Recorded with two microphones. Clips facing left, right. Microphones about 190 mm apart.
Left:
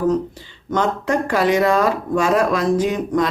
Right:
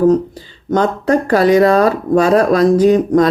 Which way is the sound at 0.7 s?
40° right (ahead or behind).